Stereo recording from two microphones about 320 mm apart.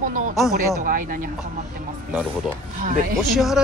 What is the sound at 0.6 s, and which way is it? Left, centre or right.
Speech, right.